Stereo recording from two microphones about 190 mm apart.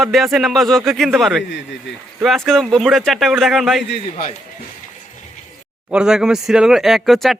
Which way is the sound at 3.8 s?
60° left (ahead or behind).